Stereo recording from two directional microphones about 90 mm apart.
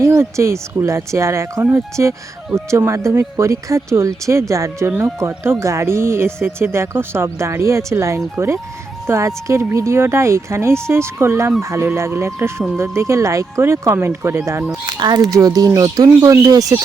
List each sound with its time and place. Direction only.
0.2 s speech: 30° right (ahead or behind)
14.7 s speech: 50° right (ahead or behind)